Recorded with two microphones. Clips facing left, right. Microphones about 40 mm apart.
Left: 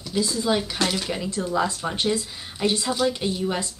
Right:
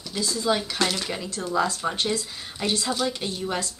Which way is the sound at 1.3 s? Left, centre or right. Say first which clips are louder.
Even; left.